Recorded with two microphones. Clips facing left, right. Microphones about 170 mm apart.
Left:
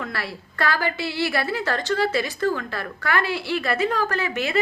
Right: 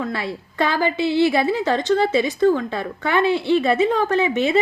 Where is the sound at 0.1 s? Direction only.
20° right (ahead or behind).